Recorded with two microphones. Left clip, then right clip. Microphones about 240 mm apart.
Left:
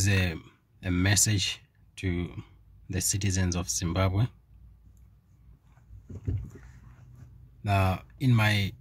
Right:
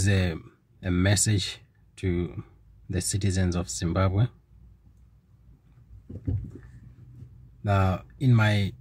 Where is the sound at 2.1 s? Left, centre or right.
Left.